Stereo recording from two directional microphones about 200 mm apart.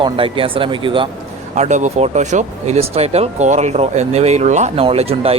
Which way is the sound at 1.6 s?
35° right (ahead or behind).